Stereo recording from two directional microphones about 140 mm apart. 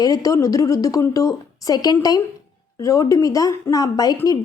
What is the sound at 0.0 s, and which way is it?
A child's voice, 25° left (ahead or behind).